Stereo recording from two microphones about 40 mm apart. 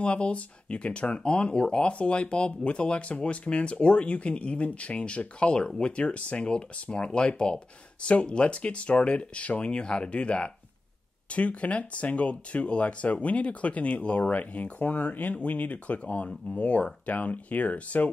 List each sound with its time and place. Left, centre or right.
0.0 s speech: left